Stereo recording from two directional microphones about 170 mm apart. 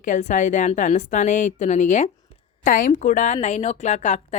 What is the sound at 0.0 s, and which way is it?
A woman's voice, 45° left (ahead or behind).